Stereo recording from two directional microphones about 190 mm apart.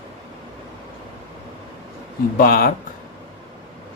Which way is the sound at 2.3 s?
50° left (ahead or behind).